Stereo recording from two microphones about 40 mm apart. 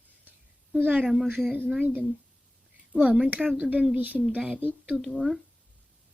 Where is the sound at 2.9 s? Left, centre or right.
Right.